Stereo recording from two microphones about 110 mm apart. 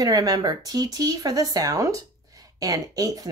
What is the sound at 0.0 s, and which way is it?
Speech, 35° right (ahead or behind).